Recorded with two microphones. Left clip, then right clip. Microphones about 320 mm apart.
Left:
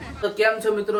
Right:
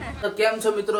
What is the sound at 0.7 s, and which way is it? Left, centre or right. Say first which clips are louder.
Speech: even; centre.